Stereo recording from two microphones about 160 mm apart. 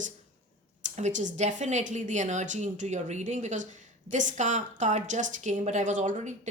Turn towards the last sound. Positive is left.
turn(degrees=-50)  # may be behind; listen again after turning